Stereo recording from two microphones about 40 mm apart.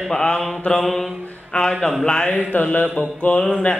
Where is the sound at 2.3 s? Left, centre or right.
Left.